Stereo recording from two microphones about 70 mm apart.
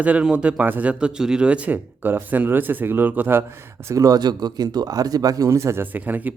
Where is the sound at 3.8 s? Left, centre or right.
Right.